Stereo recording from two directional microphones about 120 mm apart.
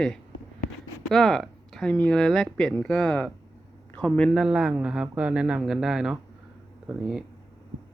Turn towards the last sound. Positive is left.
turn(degrees=-10)  # may be behind; listen again after turning